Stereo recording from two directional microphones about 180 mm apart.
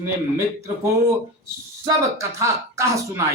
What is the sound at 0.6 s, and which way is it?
Speech, 15° right (ahead or behind).